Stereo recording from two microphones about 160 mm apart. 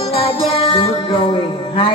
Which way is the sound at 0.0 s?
40° left (ahead or behind).